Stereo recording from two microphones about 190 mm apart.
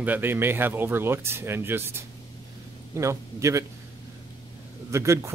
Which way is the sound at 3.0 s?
15° right (ahead or behind).